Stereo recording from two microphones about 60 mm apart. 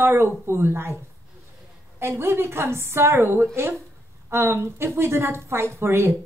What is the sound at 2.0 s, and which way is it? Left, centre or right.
A woman's voice, right.